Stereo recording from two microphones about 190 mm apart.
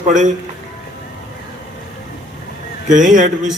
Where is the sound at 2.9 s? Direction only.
40° right (ahead or behind).